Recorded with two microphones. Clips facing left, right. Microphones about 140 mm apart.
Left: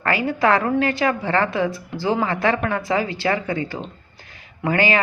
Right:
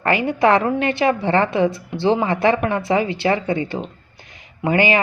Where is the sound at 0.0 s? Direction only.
20° right (ahead or behind).